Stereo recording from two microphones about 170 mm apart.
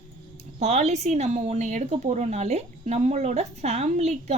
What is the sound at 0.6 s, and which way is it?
A woman's voice, 40° right (ahead or behind).